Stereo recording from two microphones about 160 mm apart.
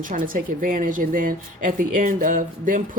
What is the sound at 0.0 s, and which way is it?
A woman's voice, 60° right (ahead or behind).